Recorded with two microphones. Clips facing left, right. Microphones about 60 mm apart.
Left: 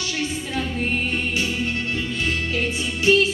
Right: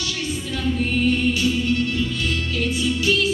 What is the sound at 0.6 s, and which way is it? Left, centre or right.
Music, left.